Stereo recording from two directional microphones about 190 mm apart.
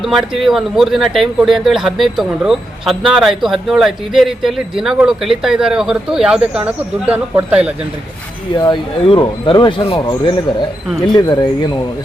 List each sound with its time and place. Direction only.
0.0 s speech: centre (ahead or behind)
8.5 s speech: 25° left (ahead or behind)